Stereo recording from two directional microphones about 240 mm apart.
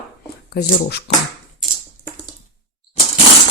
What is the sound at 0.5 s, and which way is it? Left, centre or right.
Speech, left.